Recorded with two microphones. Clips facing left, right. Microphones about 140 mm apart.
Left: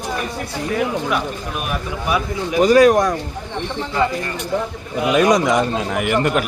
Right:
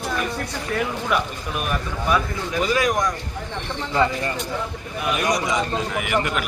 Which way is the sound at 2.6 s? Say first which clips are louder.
Left 10 dB; 40° left (ahead or behind).